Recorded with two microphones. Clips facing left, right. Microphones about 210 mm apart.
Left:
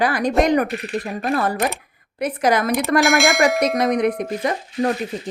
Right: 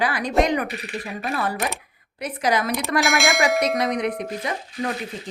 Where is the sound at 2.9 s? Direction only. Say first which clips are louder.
Left 4 dB; centre (ahead or behind).